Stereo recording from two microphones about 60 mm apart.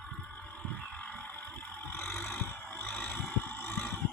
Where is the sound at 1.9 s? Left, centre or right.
Left.